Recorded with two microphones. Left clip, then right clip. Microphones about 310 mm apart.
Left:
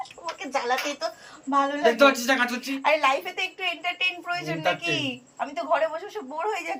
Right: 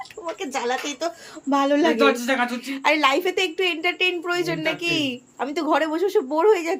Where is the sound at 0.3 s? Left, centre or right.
Centre.